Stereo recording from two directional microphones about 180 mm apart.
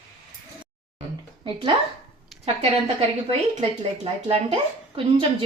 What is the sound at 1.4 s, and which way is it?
Speech, 25° right (ahead or behind).